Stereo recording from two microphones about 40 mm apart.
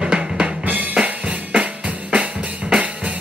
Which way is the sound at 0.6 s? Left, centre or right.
Right.